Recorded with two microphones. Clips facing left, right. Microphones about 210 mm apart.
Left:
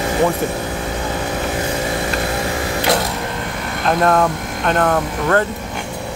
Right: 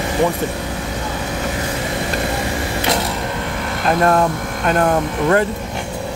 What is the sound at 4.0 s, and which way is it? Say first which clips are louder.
Speech: even; 5° right (ahead or behind).